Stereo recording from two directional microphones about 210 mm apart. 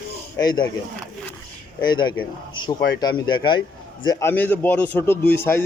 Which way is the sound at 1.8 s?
20° left (ahead or behind).